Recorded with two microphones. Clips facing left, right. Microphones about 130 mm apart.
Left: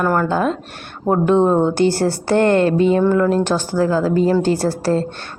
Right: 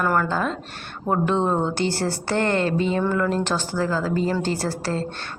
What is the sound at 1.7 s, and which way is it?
Speech, 50° left (ahead or behind).